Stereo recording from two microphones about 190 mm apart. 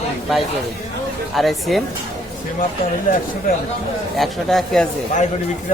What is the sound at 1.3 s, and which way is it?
Speech, centre (ahead or behind).